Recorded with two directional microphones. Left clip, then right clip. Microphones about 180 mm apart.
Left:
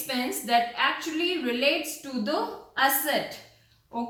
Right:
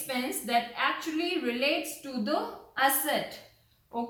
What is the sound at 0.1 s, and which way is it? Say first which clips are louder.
A woman's voice: left 4 dB; 15° right (ahead or behind).